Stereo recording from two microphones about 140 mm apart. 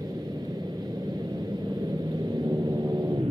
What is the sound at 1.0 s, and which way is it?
Vehicle, 30° right (ahead or behind).